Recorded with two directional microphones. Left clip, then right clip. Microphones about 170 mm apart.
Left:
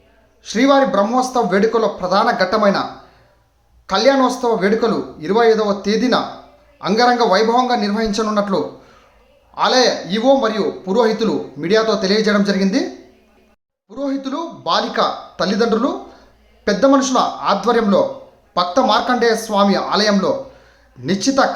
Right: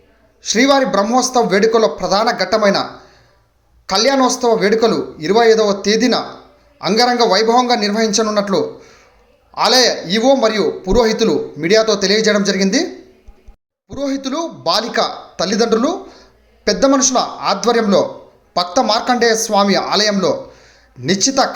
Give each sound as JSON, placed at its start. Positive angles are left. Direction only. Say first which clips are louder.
{"t": 0.4, "sound": "speech", "louder": "right 1 dB", "side_deg": -15}
{"t": 3.8, "sound": "speech", "louder": "even", "side_deg": -15}
{"t": 13.9, "sound": "speech", "louder": "right 2 dB", "side_deg": -15}